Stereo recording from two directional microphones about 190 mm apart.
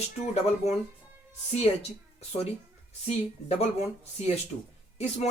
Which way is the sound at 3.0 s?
35° left (ahead or behind).